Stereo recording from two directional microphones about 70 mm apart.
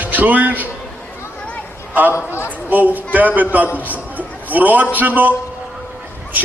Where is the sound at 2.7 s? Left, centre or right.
Right.